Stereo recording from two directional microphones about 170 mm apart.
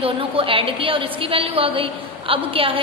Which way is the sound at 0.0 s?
30° right (ahead or behind).